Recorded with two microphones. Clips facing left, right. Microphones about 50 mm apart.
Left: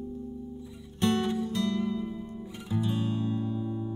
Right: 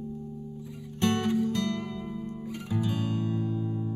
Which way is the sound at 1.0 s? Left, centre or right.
Right.